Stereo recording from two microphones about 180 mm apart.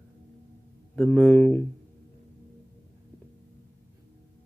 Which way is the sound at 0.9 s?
5° left (ahead or behind).